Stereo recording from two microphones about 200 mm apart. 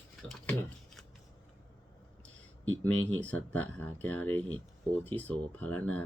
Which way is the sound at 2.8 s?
5° left (ahead or behind).